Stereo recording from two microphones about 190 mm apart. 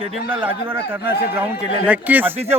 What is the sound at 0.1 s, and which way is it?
A man's voice, 10° right (ahead or behind).